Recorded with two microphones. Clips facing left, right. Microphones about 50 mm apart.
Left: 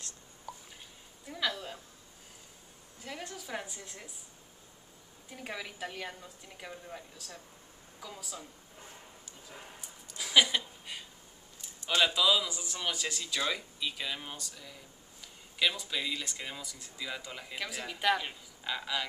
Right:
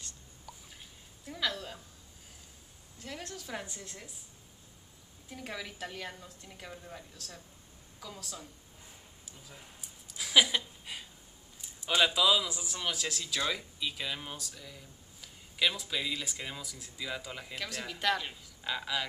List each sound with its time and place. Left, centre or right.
1.2 s a sound: centre
3.0 s a man's voice: centre
5.3 s a woman's voice: centre
10.0 s a sound: centre
11.6 s a man's voice: centre
18.6 s a man's voice: centre